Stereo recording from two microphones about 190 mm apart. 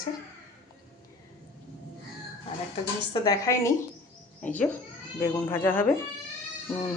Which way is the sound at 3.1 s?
20° left (ahead or behind).